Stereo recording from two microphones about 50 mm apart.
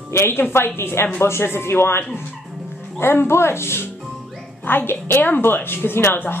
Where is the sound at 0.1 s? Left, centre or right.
Left.